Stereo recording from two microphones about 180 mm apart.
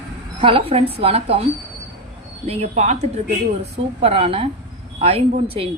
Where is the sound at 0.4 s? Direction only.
30° right (ahead or behind).